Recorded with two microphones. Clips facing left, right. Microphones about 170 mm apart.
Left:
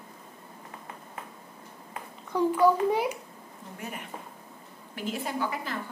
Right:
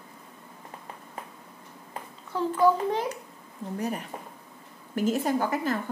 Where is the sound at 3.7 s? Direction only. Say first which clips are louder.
Right 7 dB; 35° right (ahead or behind).